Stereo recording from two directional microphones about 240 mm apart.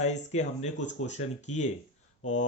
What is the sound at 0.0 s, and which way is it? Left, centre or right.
Speech, left.